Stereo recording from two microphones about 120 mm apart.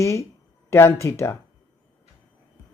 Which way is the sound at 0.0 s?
25° left (ahead or behind).